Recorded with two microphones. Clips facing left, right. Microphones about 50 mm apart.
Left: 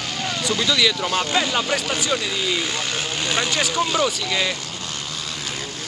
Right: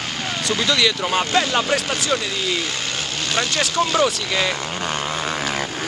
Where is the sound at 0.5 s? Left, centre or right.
Centre.